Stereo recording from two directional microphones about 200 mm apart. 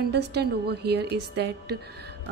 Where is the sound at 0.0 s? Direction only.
55° right (ahead or behind).